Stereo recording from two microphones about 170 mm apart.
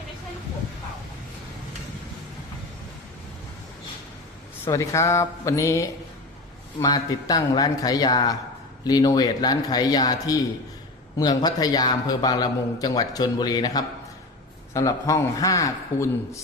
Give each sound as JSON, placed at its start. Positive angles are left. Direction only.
{"t": 4.6, "sound": "a man's voice", "side_deg": 20}